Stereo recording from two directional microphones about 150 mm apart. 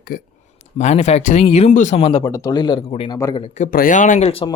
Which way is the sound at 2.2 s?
20° left (ahead or behind).